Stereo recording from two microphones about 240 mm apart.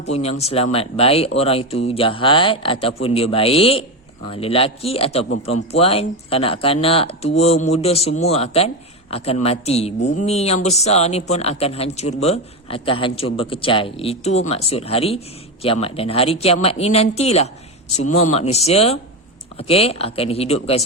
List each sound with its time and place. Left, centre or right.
0.1 s speech: left